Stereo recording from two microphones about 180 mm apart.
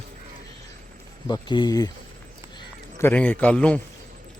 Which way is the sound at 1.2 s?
25° left (ahead or behind).